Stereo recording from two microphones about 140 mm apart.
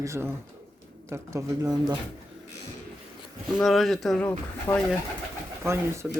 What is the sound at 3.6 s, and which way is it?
Speech, centre (ahead or behind).